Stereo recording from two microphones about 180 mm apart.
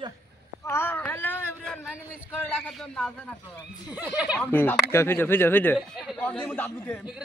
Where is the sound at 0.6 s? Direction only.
15° left (ahead or behind).